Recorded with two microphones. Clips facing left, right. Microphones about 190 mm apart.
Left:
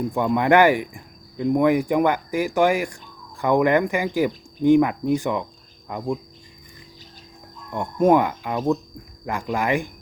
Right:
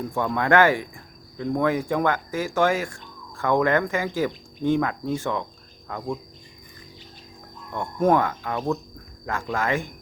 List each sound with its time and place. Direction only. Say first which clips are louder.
0.1 s speech: left 3 dB; 15° left (ahead or behind)
7.7 s speech: left 3 dB; 15° left (ahead or behind)